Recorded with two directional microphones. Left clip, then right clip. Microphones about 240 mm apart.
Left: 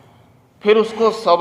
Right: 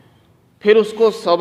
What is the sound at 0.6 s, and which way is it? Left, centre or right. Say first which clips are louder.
Speech: right 2 dB; right.